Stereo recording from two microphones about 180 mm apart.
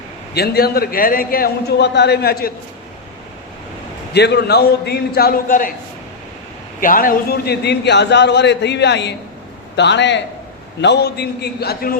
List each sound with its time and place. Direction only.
0.3 s a man's voice: 60° left (ahead or behind)
4.1 s a man's voice: 65° left (ahead or behind); by 5.7 s 50° left (ahead or behind)
6.7 s a man's voice: 50° left (ahead or behind); by 10.2 s 80° left
10.8 s a man's voice: 70° left (ahead or behind)